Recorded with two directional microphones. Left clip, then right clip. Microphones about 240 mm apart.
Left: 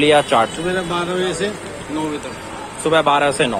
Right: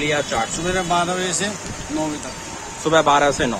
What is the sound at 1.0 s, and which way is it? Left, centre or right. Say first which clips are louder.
Speech: left 1 dB; right.